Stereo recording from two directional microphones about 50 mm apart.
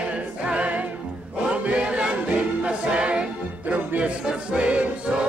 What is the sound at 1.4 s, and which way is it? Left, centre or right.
Chant, right.